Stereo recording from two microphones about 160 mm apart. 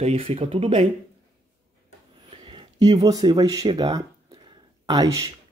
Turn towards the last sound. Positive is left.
turn(degrees=-20)  # may be behind; listen again after turning